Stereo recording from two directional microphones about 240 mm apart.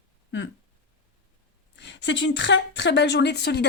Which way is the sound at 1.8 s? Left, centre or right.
Left.